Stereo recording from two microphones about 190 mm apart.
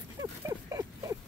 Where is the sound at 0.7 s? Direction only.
15° right (ahead or behind).